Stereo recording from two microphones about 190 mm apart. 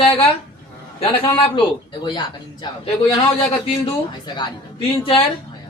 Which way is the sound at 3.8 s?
25° left (ahead or behind).